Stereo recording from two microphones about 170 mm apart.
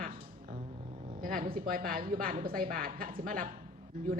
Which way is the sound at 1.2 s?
55° right (ahead or behind).